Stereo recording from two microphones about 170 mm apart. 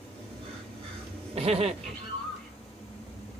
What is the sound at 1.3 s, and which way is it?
Speech, 35° right (ahead or behind).